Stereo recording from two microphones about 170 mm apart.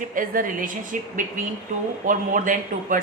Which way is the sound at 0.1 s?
55° right (ahead or behind).